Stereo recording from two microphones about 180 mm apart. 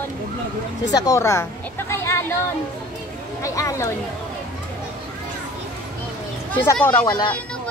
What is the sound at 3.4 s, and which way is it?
Speech, 15° left (ahead or behind).